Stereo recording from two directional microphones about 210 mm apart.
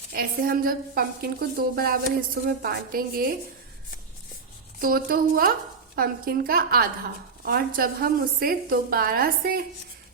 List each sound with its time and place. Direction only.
0.1 s a woman's voice: 45° right (ahead or behind)
4.8 s a woman's voice: 45° right (ahead or behind)